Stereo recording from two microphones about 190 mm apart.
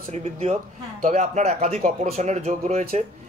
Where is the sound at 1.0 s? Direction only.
40° right (ahead or behind).